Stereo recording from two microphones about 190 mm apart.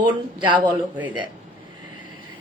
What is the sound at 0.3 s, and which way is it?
Speech, 25° right (ahead or behind).